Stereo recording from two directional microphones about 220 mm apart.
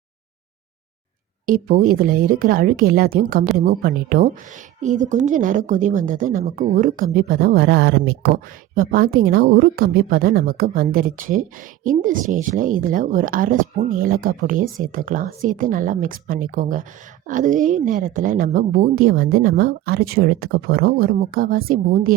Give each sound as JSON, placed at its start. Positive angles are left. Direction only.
{"t": 1.5, "sound": "a woman's voice", "side_deg": -40}